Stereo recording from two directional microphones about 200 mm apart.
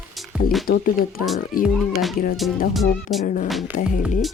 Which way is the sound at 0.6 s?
45° left (ahead or behind).